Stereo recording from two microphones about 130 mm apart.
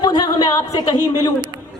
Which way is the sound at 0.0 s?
30° left (ahead or behind).